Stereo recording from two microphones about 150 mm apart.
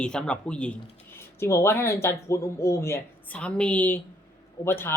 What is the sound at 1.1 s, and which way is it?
Speech, 15° left (ahead or behind).